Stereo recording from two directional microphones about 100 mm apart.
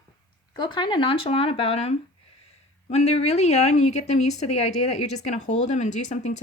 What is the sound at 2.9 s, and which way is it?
A woman's voice, 90° left.